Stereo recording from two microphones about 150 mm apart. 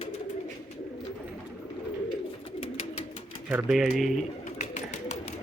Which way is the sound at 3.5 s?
15° right (ahead or behind).